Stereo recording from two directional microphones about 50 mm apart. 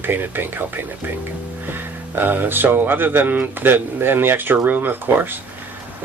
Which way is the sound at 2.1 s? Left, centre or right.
Right.